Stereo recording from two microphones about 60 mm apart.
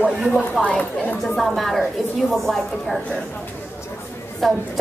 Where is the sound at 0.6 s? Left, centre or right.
Left.